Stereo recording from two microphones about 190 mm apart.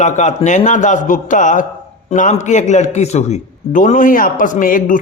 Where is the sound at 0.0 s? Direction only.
40° left (ahead or behind).